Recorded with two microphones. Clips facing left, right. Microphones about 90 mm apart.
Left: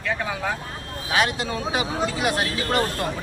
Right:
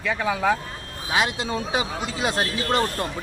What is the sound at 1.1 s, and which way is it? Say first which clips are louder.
Speech: left 1 dB; 20° right (ahead or behind).